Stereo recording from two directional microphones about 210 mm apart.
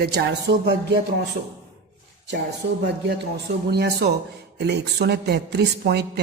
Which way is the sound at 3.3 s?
50° right (ahead or behind).